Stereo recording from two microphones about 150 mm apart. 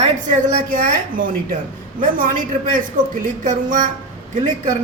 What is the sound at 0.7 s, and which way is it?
Speech, 65° right (ahead or behind).